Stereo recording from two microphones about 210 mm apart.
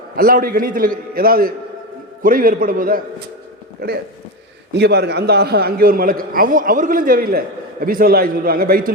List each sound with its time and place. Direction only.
0.2 s a man's voice: 45° right (ahead or behind)